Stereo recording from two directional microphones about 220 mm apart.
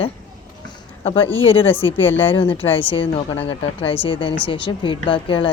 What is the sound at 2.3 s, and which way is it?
Speech, 25° left (ahead or behind).